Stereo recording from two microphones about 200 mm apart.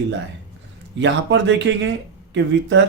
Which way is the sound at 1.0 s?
65° right (ahead or behind).